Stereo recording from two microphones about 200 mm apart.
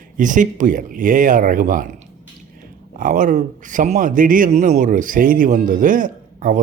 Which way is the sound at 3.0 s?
45° right (ahead or behind).